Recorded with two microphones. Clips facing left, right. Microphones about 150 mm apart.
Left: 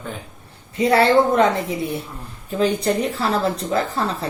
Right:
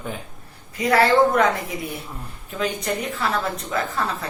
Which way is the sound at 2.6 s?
30° left (ahead or behind).